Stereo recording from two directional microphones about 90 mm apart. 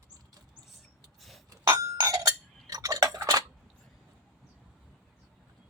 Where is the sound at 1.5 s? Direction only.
40° right (ahead or behind).